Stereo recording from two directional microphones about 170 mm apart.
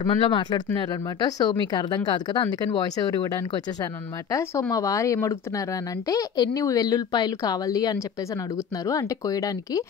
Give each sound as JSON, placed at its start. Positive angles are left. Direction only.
{"t": 0.0, "sound": "speech", "side_deg": 30}
{"t": 4.3, "sound": "speech", "side_deg": 20}